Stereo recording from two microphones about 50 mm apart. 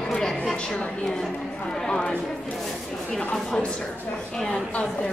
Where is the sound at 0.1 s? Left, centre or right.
Centre.